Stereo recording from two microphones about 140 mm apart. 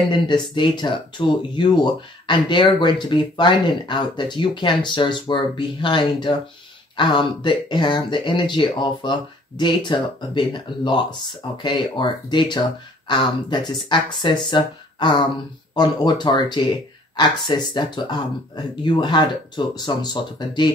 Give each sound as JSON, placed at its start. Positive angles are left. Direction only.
{"t": 0.1, "sound": "speech", "side_deg": 35}